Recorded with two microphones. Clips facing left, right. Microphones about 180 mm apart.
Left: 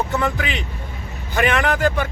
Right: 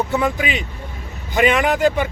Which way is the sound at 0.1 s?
15° right (ahead or behind).